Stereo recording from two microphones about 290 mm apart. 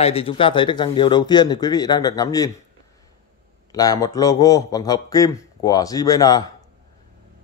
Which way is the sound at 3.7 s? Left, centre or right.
Centre.